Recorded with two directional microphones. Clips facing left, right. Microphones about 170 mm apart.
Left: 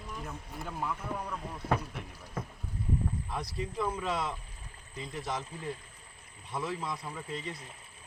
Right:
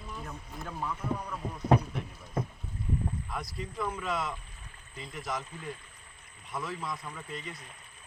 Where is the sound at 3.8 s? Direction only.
30° left (ahead or behind).